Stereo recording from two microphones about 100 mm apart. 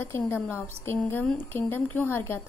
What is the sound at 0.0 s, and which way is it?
A woman's voice, 20° left (ahead or behind).